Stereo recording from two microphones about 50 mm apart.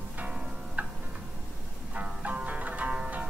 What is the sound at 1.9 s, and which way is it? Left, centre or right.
Music, right.